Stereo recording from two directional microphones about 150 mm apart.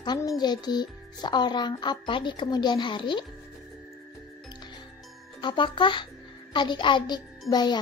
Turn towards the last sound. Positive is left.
turn(degrees=30)  # may be behind; listen again after turning